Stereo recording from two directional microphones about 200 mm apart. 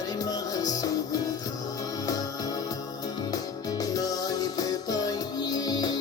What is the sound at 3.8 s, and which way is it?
Music, 20° left (ahead or behind).